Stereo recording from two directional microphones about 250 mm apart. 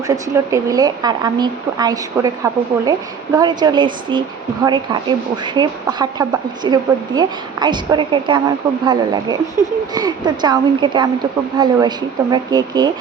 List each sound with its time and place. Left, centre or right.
0.1 s speech: centre